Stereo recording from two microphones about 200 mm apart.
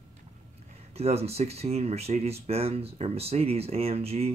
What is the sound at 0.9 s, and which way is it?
Speech, 30° right (ahead or behind).